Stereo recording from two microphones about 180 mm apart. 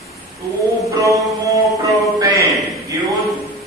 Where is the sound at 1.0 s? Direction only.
20° right (ahead or behind).